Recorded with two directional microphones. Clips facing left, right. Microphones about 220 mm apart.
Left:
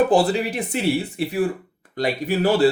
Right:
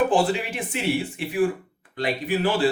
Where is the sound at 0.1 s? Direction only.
40° left (ahead or behind).